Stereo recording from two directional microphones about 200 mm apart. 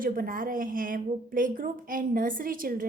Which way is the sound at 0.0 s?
45° right (ahead or behind).